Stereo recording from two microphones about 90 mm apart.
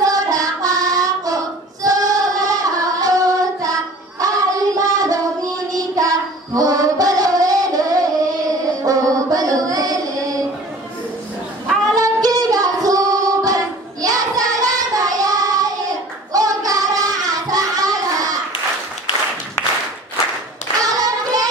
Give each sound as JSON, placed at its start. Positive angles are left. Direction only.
{"t": 0.0, "sound": "child singing", "side_deg": -40}
{"t": 11.9, "sound": "child singing", "side_deg": -40}
{"t": 20.8, "sound": "clapping", "side_deg": -45}